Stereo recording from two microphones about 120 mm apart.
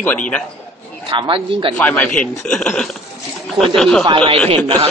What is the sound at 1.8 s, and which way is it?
A man's voice, 10° left (ahead or behind).